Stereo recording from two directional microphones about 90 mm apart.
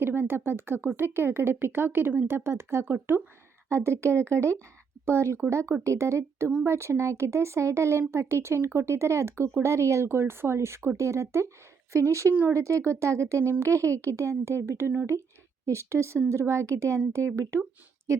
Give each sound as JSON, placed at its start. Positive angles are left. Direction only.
{"t": 0.0, "sound": "speech", "side_deg": -25}
{"t": 12.3, "sound": "speech", "side_deg": -20}
{"t": 12.5, "sound": "speech", "side_deg": -35}